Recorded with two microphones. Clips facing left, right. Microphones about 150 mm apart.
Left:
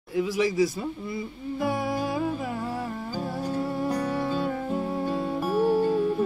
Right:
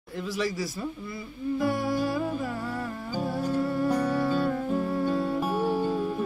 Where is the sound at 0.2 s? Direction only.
15° left (ahead or behind).